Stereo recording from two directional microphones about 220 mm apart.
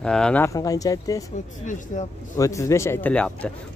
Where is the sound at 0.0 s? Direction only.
5° left (ahead or behind).